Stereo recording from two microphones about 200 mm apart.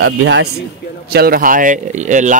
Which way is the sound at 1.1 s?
50° right (ahead or behind).